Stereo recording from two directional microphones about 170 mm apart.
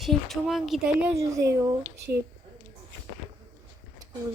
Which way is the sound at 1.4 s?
20° right (ahead or behind).